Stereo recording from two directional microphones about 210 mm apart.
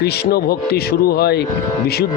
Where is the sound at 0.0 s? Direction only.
45° left (ahead or behind).